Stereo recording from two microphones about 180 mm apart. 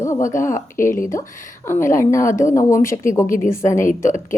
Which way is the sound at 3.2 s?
50° left (ahead or behind).